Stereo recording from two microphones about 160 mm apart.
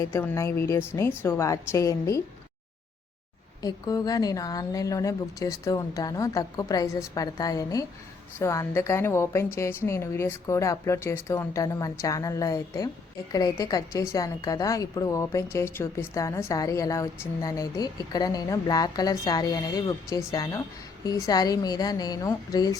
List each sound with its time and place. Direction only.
0.0 s a woman's voice: 15° left (ahead or behind)
3.6 s a woman's voice: 25° left (ahead or behind)